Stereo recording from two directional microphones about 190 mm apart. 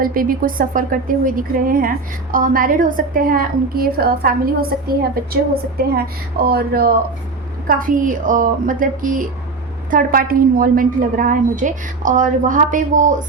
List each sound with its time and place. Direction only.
0.0 s a woman's voice: 50° right (ahead or behind)